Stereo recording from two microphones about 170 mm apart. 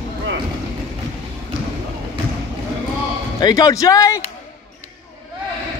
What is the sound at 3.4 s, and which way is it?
Speech, 20° left (ahead or behind).